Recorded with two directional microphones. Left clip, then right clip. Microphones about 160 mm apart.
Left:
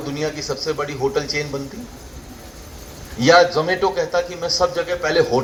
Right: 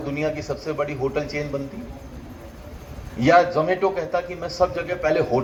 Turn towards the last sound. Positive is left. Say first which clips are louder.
# left 3 dB
turn(degrees=-45)  # may be behind; listen again after turning